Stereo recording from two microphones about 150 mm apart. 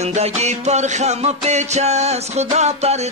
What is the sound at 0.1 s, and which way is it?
Music, 50° right (ahead or behind).